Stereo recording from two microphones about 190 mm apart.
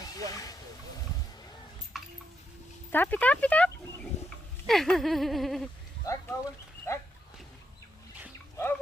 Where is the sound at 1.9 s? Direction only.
Centre (ahead or behind).